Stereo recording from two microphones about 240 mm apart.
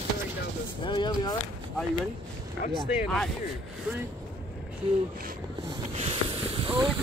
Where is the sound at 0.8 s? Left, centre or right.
Centre.